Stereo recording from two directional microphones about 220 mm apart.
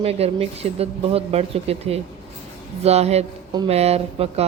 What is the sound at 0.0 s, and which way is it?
Speech, 25° right (ahead or behind).